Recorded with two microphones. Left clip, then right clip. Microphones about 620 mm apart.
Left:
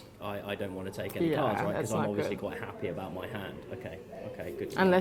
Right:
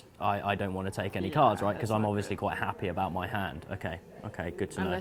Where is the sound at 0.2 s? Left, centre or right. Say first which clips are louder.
Right 7 dB; right.